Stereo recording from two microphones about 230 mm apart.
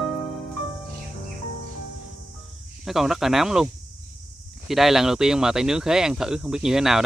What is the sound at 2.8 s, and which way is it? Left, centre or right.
Speech, centre.